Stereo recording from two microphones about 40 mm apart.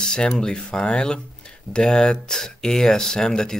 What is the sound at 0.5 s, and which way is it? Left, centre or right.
Speech, centre.